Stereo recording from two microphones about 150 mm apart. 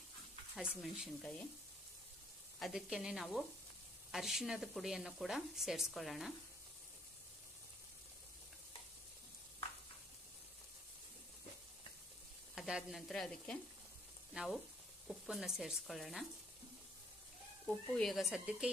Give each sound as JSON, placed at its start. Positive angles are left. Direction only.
{"t": 0.5, "sound": "speech", "side_deg": -5}
{"t": 2.6, "sound": "speech", "side_deg": 0}
{"t": 12.5, "sound": "speech", "side_deg": -5}
{"t": 17.9, "sound": "speech", "side_deg": 0}